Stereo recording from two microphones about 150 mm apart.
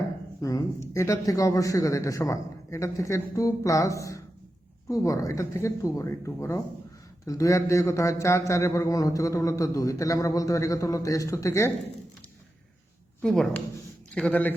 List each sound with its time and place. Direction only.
0.4 s a man's voice: 20° left (ahead or behind)
13.2 s a man's voice: 5° left (ahead or behind)